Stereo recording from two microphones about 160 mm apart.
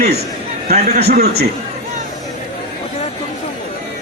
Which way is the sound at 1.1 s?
75° right (ahead or behind).